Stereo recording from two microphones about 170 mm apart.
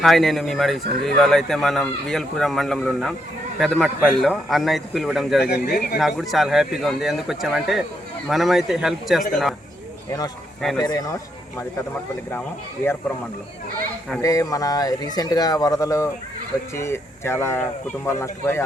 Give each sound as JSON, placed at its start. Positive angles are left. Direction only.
{"t": 0.0, "sound": "speech", "side_deg": 0}
{"t": 5.4, "sound": "speech", "side_deg": 70}
{"t": 6.0, "sound": "speech", "side_deg": 0}
{"t": 10.1, "sound": "speech", "side_deg": 20}
{"t": 10.6, "sound": "speech", "side_deg": 0}
{"t": 10.8, "sound": "speech", "side_deg": 20}
{"t": 14.2, "sound": "speech", "side_deg": 20}